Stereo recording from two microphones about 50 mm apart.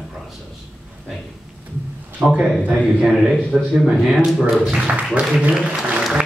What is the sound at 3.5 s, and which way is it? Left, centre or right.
Speech, centre.